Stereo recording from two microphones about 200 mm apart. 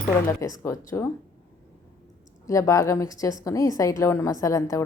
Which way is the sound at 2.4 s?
15° left (ahead or behind).